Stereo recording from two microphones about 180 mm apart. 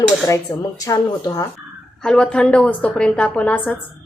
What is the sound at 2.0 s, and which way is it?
A woman's voice, 5° left (ahead or behind).